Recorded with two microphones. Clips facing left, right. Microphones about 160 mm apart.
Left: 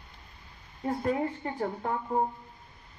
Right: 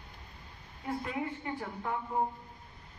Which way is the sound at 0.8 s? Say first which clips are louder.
Left 7 dB; 40° left (ahead or behind).